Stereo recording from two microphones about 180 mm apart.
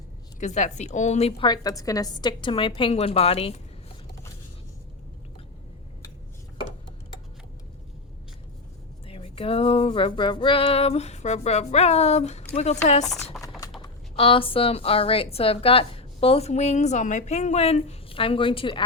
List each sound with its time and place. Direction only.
0.3 s speech: 40° left (ahead or behind)
1.5 s a woman's voice: 20° left (ahead or behind)
9.0 s speech: 30° left (ahead or behind)
13.3 s typing: centre (ahead or behind)
13.8 s speech: 30° left (ahead or behind)